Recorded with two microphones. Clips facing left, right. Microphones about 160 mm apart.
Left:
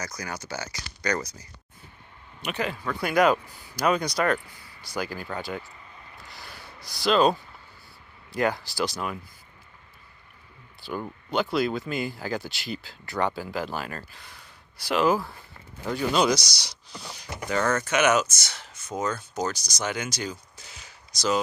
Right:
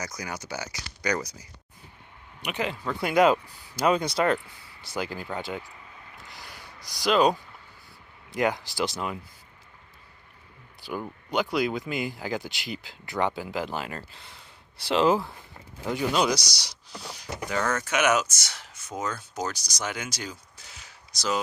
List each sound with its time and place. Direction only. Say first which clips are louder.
0.0 s speech: even; 20° right (ahead or behind)
2.4 s speech: even; 20° right (ahead or behind)
6.2 s a sound: left 1 dB; 20° right (ahead or behind)
8.3 s speech: even; 20° right (ahead or behind)
10.8 s a sound: left 1 dB; 10° right (ahead or behind)
11.3 s speech: left 1 dB; 15° right (ahead or behind)